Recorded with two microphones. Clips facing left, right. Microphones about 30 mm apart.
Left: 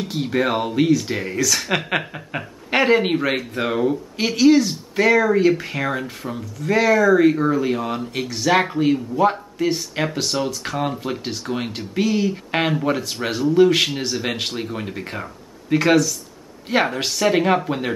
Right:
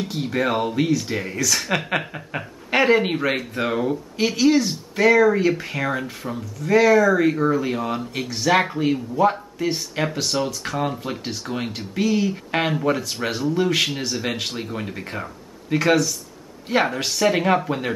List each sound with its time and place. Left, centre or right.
0.0 s speech: centre